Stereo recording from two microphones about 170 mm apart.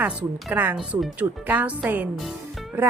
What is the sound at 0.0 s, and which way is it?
Speech, 10° right (ahead or behind).